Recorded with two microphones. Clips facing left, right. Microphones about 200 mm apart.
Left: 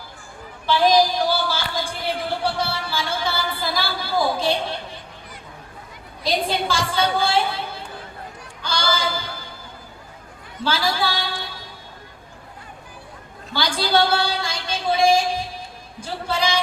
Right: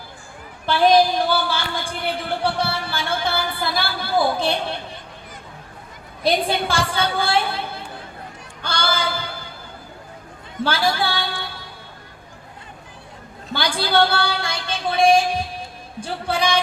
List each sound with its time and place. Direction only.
0.6 s speech: 60° right (ahead or behind)
6.2 s speech: 60° right (ahead or behind)
8.6 s a sound: 60° right (ahead or behind)
10.6 s a woman's voice: 60° right (ahead or behind)
13.5 s speech: 60° right (ahead or behind)